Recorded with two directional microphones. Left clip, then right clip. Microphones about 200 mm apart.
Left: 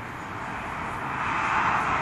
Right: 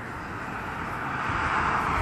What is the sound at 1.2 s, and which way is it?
Vehicle, 5° right (ahead or behind).